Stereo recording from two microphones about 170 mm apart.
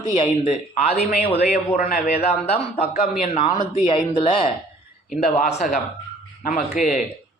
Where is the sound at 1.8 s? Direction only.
50° left (ahead or behind).